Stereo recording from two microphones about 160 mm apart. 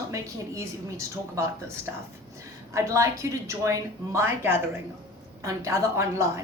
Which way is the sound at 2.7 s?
20° right (ahead or behind).